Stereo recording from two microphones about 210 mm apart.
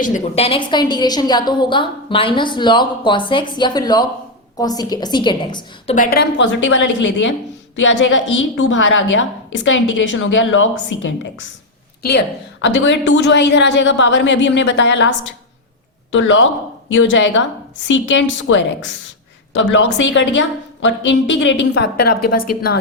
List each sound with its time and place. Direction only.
0.1 s a woman's voice: 30° left (ahead or behind)
5.9 s a woman's voice: 40° left (ahead or behind); by 11.3 s 65° left (ahead or behind)
12.6 s a woman's voice: 60° left (ahead or behind)